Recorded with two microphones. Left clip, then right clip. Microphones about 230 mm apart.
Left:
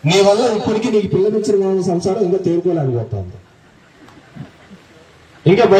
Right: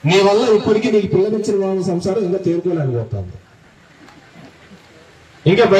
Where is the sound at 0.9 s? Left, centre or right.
Left.